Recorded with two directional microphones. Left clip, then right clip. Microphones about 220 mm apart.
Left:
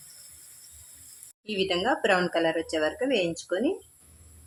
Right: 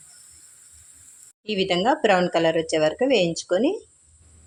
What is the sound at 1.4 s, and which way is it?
Speech, 20° right (ahead or behind).